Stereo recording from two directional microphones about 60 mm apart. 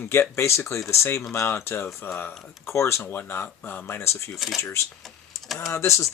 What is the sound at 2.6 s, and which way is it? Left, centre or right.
Speech, left.